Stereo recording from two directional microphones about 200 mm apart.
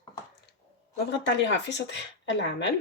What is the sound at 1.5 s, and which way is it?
Speech, 60° left (ahead or behind).